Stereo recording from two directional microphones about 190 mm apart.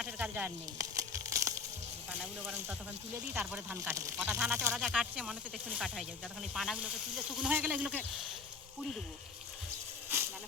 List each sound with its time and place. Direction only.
0.0 s a sound: 10° right (ahead or behind)
2.0 s speech: 5° right (ahead or behind)
10.1 s snake: 10° right (ahead or behind)